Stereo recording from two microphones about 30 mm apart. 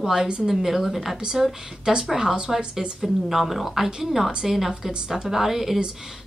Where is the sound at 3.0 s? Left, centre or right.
Centre.